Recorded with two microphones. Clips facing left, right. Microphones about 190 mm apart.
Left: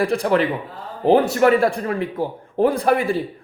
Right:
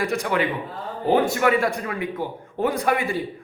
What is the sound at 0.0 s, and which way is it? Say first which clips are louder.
A man's voice: left 5 dB; 30° left (ahead or behind).